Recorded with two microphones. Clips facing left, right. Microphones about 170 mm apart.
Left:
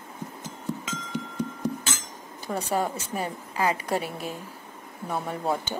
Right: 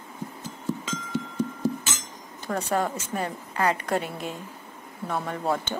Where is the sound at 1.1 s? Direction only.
15° left (ahead or behind).